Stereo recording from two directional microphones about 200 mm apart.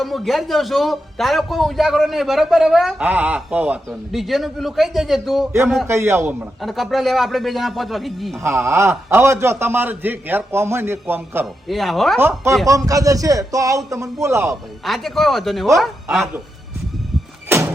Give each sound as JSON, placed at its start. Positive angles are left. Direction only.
{"t": 0.0, "sound": "a man's voice", "side_deg": 0}
{"t": 5.9, "sound": "a man's voice", "side_deg": -15}
{"t": 6.6, "sound": "a man's voice", "side_deg": 0}
{"t": 8.4, "sound": "a man's voice", "side_deg": -15}
{"t": 11.7, "sound": "a man's voice", "side_deg": 0}
{"t": 12.2, "sound": "a man's voice", "side_deg": -10}
{"t": 14.8, "sound": "a man's voice", "side_deg": 0}